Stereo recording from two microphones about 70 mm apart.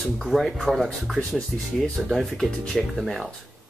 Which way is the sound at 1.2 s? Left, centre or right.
Centre.